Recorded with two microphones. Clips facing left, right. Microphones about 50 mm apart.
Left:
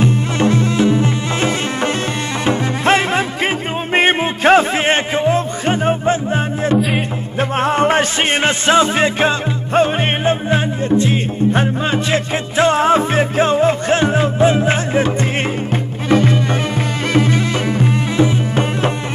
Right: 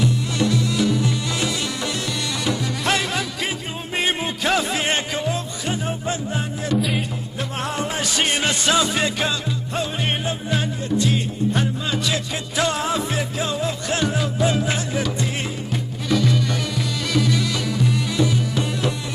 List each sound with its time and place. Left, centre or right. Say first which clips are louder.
0.0 s music: left 6 dB; left